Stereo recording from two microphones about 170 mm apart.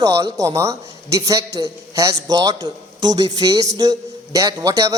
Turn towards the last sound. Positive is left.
turn(degrees=-20)  # may be behind; listen again after turning